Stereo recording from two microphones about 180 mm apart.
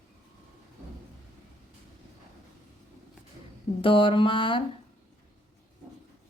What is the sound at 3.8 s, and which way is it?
Music, 30° left (ahead or behind).